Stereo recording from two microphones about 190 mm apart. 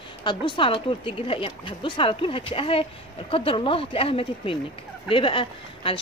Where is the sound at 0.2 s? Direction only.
25° left (ahead or behind).